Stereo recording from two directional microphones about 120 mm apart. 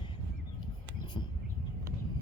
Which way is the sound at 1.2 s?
40° left (ahead or behind).